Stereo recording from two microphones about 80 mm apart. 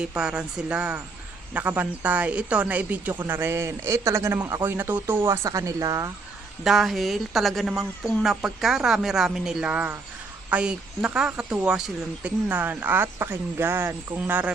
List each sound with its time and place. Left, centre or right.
0.0 s speech: centre; by 5.5 s right
5.5 s speech: right
6.7 s speech: centre; by 14.5 s right